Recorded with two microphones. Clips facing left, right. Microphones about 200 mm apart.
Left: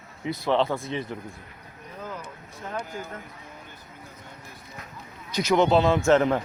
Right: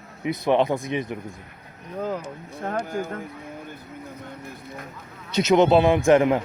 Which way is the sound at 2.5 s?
55° right (ahead or behind).